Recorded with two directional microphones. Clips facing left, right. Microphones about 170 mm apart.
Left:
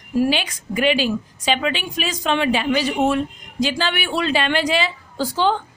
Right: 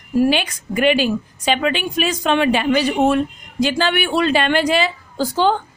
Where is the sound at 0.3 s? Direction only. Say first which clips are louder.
Right 3 dB; 50° right (ahead or behind).